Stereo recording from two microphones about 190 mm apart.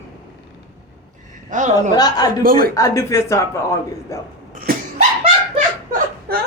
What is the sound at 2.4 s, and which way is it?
Speech, 50° right (ahead or behind).